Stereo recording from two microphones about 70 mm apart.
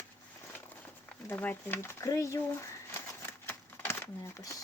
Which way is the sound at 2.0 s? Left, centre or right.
Left.